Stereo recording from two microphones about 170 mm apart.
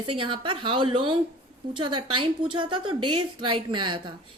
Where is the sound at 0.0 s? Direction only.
30° right (ahead or behind).